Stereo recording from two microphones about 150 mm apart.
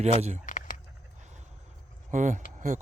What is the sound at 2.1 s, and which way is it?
Speech, 55° right (ahead or behind).